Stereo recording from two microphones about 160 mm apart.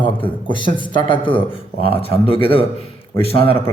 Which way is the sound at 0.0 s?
30° left (ahead or behind).